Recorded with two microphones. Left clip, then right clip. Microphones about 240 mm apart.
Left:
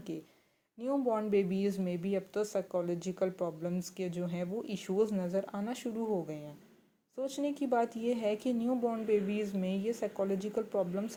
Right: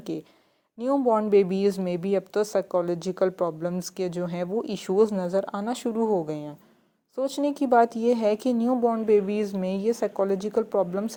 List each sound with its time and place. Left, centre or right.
0.8 s a woman's voice: right